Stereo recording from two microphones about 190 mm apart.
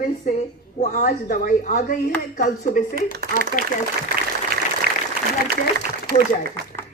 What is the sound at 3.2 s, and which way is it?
Speech, 50° right (ahead or behind).